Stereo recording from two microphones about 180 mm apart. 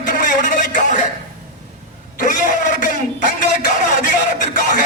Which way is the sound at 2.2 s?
45° left (ahead or behind).